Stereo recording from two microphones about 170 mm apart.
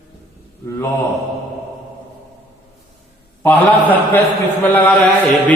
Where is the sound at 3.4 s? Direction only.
10° left (ahead or behind).